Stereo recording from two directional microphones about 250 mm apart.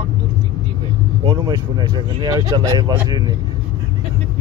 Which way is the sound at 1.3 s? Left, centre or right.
Centre.